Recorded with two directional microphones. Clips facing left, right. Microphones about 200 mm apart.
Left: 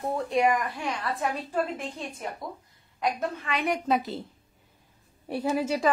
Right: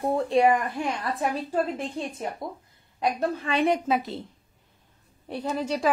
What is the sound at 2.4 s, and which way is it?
A woman's voice, 25° right (ahead or behind).